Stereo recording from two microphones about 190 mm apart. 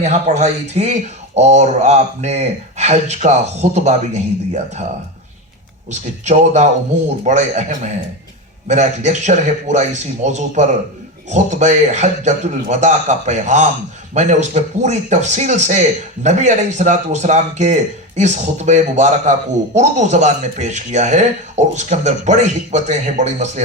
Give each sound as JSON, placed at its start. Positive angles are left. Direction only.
{"t": 0.0, "sound": "a man's voice", "side_deg": -35}
{"t": 5.9, "sound": "a man's voice", "side_deg": -40}